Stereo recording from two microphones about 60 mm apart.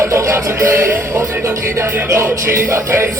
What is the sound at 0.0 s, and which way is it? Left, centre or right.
Music, right.